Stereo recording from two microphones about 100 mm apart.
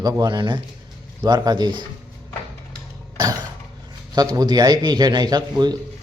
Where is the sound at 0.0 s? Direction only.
45° right (ahead or behind).